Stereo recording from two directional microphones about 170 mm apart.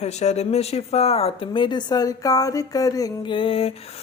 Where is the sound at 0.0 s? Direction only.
40° left (ahead or behind).